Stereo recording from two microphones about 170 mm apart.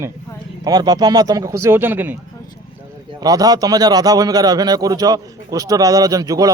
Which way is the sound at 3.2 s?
20° right (ahead or behind).